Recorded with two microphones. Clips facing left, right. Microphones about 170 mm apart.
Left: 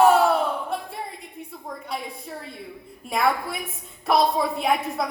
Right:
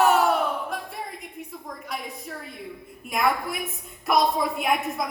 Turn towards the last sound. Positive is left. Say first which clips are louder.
# left 2 dB
turn(degrees=30)  # may be behind; listen again after turning